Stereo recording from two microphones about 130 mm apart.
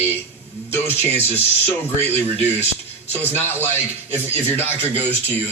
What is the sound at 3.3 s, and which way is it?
Speech, 15° left (ahead or behind).